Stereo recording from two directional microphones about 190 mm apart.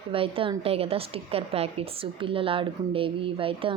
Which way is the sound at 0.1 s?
30° right (ahead or behind).